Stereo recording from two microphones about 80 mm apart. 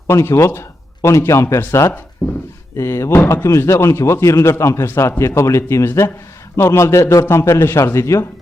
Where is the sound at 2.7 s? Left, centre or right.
Left.